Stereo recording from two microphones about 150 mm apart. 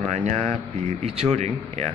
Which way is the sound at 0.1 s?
50° right (ahead or behind).